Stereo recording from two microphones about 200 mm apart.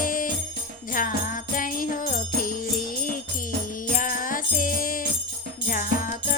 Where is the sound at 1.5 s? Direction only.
45° left (ahead or behind).